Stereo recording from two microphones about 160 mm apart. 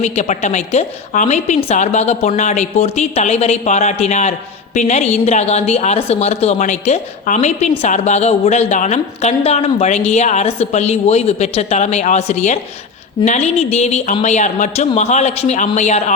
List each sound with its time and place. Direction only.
0.0 s a woman's voice: 45° left (ahead or behind)